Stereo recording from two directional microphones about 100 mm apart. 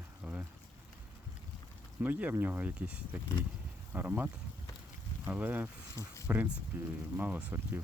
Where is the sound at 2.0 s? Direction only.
15° right (ahead or behind).